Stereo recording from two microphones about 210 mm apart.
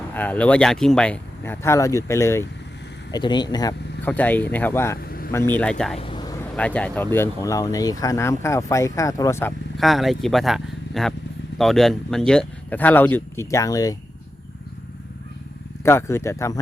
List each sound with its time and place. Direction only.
0.1 s speech: 10° left (ahead or behind)
4.0 s speech: 10° left (ahead or behind)
5.0 s vehicle: 45° left (ahead or behind)
5.3 s speech: 10° left (ahead or behind)
6.0 s vehicle: 25° left (ahead or behind)
6.6 s speech: 5° left (ahead or behind)
9.7 s speech: centre (ahead or behind); by 13.9 s 15° left (ahead or behind)
15.8 s speech: 10° left (ahead or behind)